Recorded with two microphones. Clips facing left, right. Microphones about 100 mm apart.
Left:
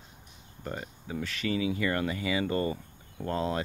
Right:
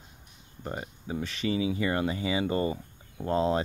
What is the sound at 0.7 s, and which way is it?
Speech, 20° right (ahead or behind).